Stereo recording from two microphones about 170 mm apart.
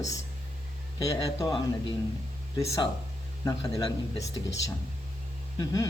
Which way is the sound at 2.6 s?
15° left (ahead or behind).